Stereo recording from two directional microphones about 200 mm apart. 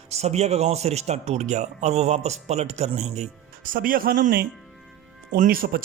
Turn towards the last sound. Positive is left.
turn(degrees=-45)  # may be behind; listen again after turning